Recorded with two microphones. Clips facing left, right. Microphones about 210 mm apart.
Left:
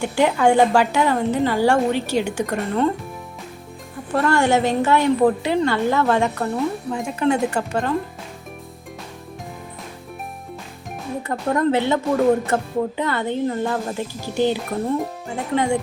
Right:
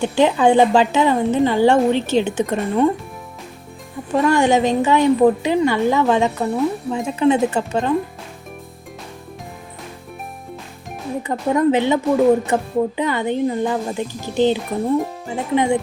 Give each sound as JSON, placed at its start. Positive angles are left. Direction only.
{"t": 0.0, "sound": "a woman's voice", "side_deg": -20}
{"t": 4.1, "sound": "a woman's voice", "side_deg": -15}
{"t": 11.2, "sound": "a woman's voice", "side_deg": -15}
{"t": 14.9, "sound": "speech", "side_deg": 0}
{"t": 15.5, "sound": "a woman's voice", "side_deg": -15}